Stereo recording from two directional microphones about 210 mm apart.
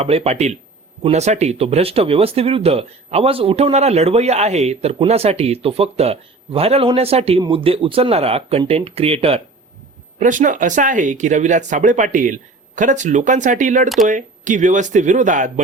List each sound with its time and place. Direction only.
0.0 s speech: 30° right (ahead or behind)
13.8 s speech: centre (ahead or behind)
14.1 s speech: 35° right (ahead or behind)